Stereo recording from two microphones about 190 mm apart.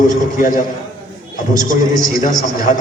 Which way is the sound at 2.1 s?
45° left (ahead or behind).